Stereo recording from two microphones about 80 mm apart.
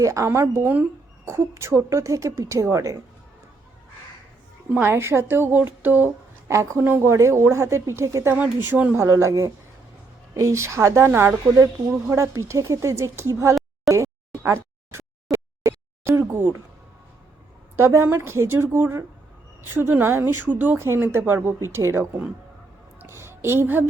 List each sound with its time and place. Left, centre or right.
0.0 s a woman's voice: right
0.6 s a woman's voice: right
1.2 s a woman's voice: right
4.7 s a woman's voice: right
6.5 s a woman's voice: right
8.3 s a woman's voice: right
9.0 s a woman's voice: right
13.9 s a sound: right
17.7 s a woman's voice: right
23.0 s a sound: right